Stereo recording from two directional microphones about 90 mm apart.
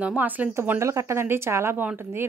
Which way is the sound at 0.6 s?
30° right (ahead or behind).